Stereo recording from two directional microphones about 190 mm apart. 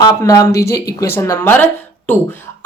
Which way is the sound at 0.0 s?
20° left (ahead or behind).